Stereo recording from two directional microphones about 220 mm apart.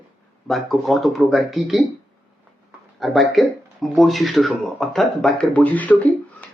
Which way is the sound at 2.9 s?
Centre (ahead or behind).